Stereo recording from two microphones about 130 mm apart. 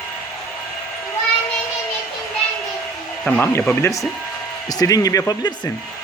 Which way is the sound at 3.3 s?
10° left (ahead or behind).